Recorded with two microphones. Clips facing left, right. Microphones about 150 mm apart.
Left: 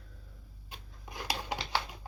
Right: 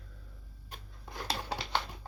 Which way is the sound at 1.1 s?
15° left (ahead or behind).